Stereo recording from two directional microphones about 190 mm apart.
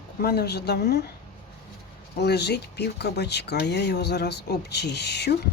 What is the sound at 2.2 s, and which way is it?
Speech, 60° left (ahead or behind).